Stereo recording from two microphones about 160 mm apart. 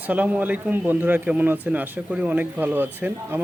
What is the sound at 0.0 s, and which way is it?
Speech, 10° right (ahead or behind).